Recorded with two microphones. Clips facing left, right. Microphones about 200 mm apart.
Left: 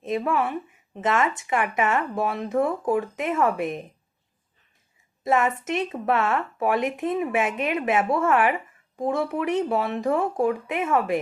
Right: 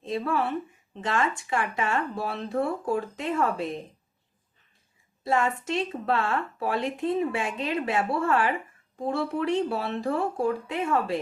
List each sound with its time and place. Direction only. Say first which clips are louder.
0.0 s speech: left 3 dB; 20° left (ahead or behind)
5.2 s speech: left 3 dB; 20° left (ahead or behind)